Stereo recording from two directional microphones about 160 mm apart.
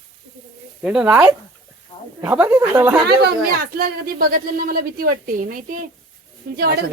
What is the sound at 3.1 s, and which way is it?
Speech, 75° right (ahead or behind).